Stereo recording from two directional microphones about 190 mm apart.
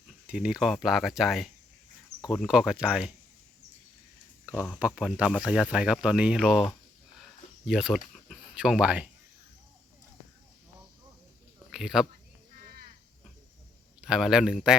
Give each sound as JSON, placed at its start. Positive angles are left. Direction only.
{"t": 0.3, "sound": "speech", "side_deg": -5}
{"t": 4.8, "sound": "speech", "side_deg": -5}
{"t": 7.2, "sound": "a sound", "side_deg": 0}
{"t": 11.7, "sound": "speech", "side_deg": 0}
{"t": 12.6, "sound": "cricket", "side_deg": -50}
{"t": 14.0, "sound": "speech", "side_deg": -5}